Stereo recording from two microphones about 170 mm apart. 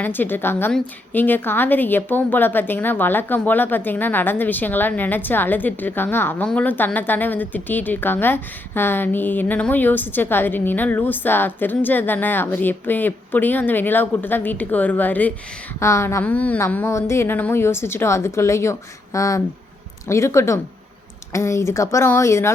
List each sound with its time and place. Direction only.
0.0 s a woman's voice: 10° left (ahead or behind)